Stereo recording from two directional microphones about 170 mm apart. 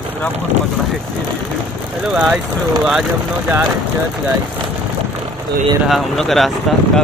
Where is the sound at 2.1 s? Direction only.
5° right (ahead or behind).